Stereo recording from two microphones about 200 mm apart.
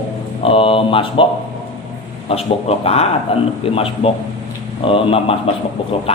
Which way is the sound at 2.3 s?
30° left (ahead or behind).